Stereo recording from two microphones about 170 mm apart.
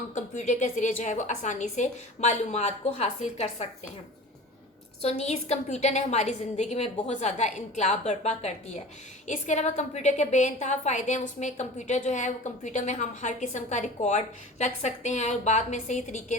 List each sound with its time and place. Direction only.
0.1 s a woman's voice: 45° left (ahead or behind)
5.0 s a woman's voice: 40° left (ahead or behind)